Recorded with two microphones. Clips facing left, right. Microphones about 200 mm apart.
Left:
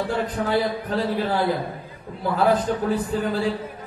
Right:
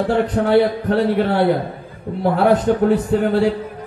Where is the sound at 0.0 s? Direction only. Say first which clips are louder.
Right 7 dB; 70° right (ahead or behind).